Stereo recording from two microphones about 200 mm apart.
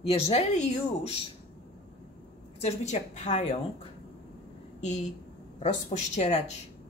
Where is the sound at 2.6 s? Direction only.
35° left (ahead or behind).